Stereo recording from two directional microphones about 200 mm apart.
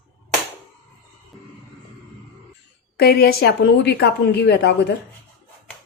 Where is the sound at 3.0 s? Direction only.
50° left (ahead or behind).